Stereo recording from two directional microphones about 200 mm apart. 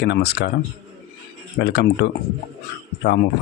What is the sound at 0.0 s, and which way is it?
Speech, 55° left (ahead or behind).